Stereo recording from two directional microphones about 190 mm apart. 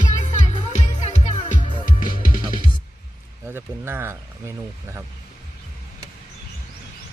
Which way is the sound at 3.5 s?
10° right (ahead or behind).